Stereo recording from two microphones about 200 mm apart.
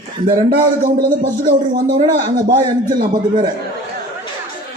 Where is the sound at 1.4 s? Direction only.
45° right (ahead or behind).